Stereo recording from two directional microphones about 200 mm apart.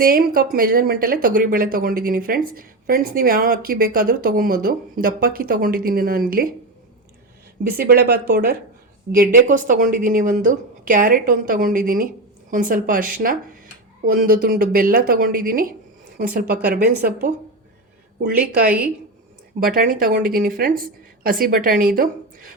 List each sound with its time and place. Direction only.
0.0 s speech: 45° right (ahead or behind)
7.8 s a woman's voice: 50° right (ahead or behind)